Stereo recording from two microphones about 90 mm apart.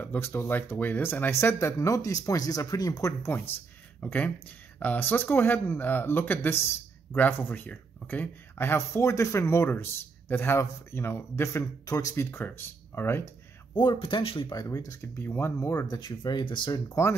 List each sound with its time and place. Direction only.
0.0 s speech: 25° left (ahead or behind)
4.0 s speech: 15° left (ahead or behind); by 12.3 s 35° left (ahead or behind)
12.3 s speech: 25° left (ahead or behind)
13.9 s speech: 80° left
14.5 s speech: 40° left (ahead or behind)
15.1 s speech: 25° left (ahead or behind)
15.9 s speech: 50° left (ahead or behind)
16.7 s speech: 35° left (ahead or behind)